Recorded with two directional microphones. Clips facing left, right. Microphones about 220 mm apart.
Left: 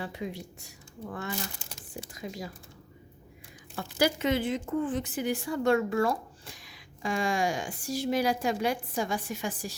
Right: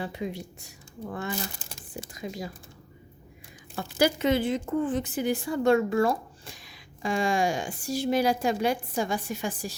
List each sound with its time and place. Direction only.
0.0 s speech: 20° right (ahead or behind)
3.8 s speech: 25° right (ahead or behind)